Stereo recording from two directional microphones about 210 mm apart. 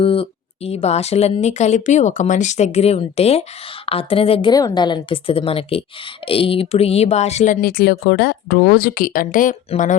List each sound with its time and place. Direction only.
0.0 s a woman's voice: 25° left (ahead or behind)